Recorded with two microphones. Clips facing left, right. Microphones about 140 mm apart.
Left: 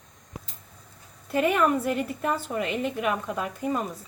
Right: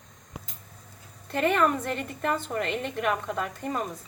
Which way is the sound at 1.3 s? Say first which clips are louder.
Left 1 dB; 5° left (ahead or behind).